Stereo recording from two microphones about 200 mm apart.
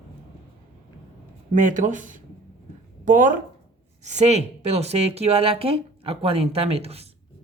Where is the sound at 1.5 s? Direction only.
40° right (ahead or behind).